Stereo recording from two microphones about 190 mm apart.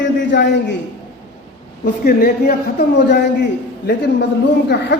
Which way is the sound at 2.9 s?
65° left (ahead or behind).